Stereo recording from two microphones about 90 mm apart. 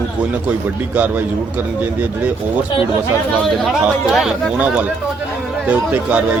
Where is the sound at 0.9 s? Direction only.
15° right (ahead or behind).